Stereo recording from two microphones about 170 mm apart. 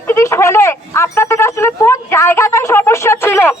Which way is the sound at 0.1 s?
15° left (ahead or behind).